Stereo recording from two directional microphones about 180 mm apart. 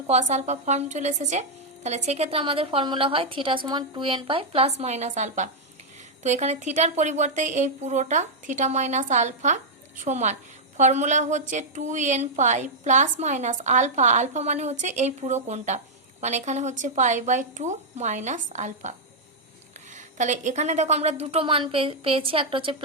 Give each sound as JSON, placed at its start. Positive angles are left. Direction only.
{"t": 0.1, "sound": "a woman's voice", "side_deg": -40}